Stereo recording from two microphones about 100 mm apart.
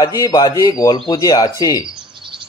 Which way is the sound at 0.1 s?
40° left (ahead or behind).